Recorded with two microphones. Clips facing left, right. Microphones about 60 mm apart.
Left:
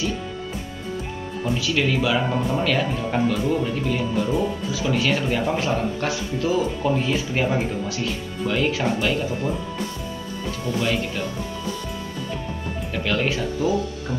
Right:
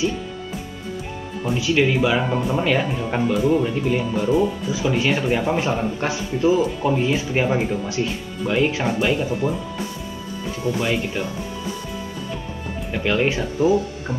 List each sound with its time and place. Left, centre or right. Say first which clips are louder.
1.5 s speech: right 4 dB; centre
2.2 s speech: right 1 dB; centre
2.5 s speech: right 3 dB; centre
4.4 s speech: right 3 dB; right
10.6 s speech: right 2 dB; right
12.9 s speech: right 3 dB; centre